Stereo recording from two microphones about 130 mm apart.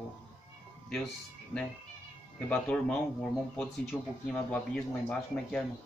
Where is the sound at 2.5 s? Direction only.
10° left (ahead or behind).